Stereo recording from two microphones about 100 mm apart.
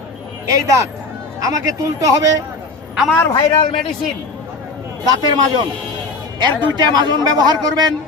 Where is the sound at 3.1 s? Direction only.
25° left (ahead or behind).